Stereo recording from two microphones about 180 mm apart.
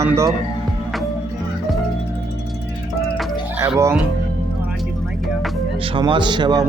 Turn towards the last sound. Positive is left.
turn(degrees=-25)  # may be behind; listen again after turning